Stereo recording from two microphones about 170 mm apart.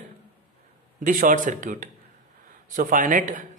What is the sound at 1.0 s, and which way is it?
Speech, 50° right (ahead or behind).